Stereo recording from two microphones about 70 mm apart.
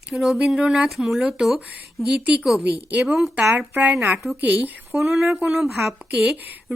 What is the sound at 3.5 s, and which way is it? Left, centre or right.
Speech, right.